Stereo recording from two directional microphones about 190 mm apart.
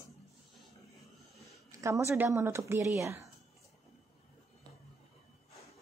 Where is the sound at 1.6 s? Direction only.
15° right (ahead or behind).